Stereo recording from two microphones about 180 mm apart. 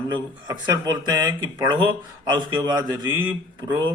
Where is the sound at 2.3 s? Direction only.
25° right (ahead or behind).